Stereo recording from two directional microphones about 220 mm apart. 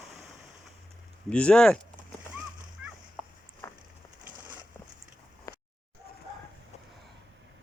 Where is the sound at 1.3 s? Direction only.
5° left (ahead or behind).